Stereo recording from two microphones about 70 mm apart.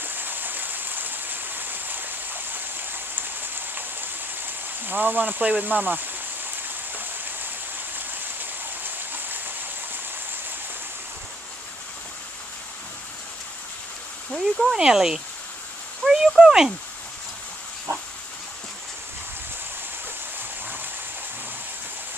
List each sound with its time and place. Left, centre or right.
0.0 s stream: right
6.9 s rain: right
14.3 s speech: centre